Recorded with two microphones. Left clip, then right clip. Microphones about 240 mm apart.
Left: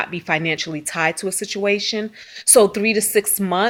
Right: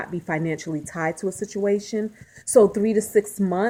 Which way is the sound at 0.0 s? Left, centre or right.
Left.